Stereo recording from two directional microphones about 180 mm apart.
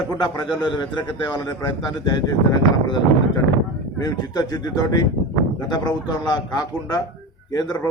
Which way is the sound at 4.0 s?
20° left (ahead or behind).